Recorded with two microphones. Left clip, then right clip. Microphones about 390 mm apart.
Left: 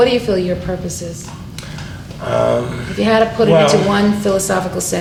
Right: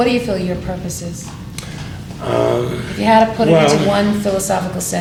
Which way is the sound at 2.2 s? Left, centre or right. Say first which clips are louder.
Left 1 dB; right.